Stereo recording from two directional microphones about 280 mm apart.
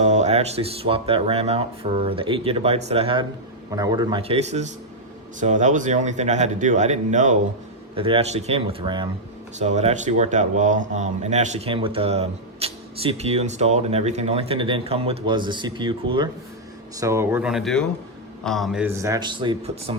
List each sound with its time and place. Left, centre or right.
0.0 s speech: right